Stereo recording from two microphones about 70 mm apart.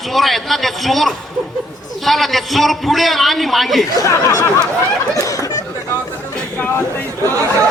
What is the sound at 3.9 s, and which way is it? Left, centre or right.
Speech, left.